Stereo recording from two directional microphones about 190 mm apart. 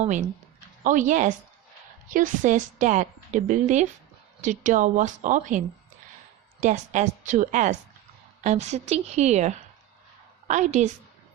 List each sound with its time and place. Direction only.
0.0 s a woman's voice: 40° right (ahead or behind)
10.5 s a woman's voice: 40° right (ahead or behind)